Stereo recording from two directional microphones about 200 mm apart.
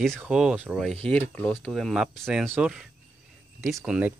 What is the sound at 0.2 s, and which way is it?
Speech, 5° right (ahead or behind).